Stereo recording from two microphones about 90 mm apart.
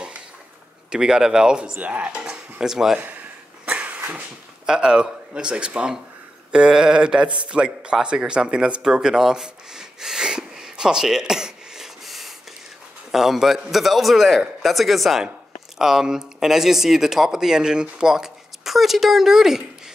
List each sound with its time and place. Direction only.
0.9 s speech: 5° right (ahead or behind)
3.0 s a sound: 15° right (ahead or behind)
4.6 s speech: 10° right (ahead or behind)